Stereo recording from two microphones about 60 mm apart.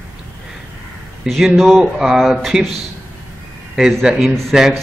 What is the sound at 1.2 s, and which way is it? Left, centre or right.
Speech, centre.